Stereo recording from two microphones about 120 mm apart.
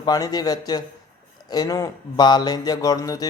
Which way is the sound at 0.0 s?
30° left (ahead or behind).